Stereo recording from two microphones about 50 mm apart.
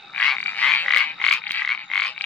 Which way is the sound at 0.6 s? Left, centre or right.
Left.